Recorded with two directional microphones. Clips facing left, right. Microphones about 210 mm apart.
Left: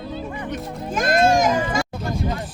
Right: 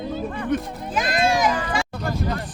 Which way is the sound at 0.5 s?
55° right (ahead or behind).